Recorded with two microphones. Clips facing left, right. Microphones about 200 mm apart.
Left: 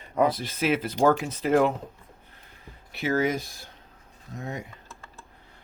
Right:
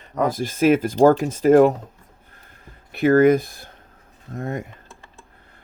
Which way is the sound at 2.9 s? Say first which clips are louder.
Right 11 dB; 55° right (ahead or behind).